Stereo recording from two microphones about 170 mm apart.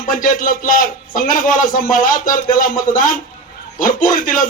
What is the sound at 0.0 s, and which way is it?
A man's voice, 55° left (ahead or behind).